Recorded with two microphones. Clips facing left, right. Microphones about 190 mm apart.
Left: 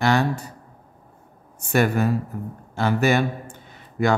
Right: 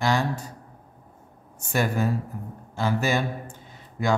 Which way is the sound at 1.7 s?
65° left (ahead or behind).